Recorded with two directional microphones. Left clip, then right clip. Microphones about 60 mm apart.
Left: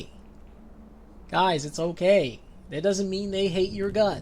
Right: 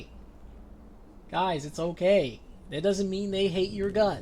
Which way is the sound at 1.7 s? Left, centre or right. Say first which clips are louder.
Left 1 dB; centre.